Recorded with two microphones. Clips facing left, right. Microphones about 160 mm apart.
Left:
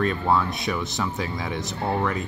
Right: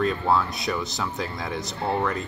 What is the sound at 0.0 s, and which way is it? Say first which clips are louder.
Speech: even; centre (ahead or behind).